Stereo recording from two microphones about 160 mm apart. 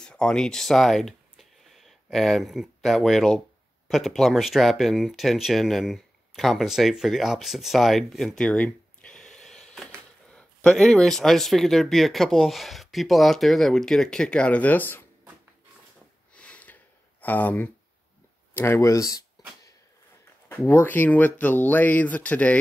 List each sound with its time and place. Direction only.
0.0 s speech: 5° left (ahead or behind)
16.3 s sniff: 10° left (ahead or behind)
17.2 s speech: 10° left (ahead or behind)
20.4 s speech: 15° left (ahead or behind)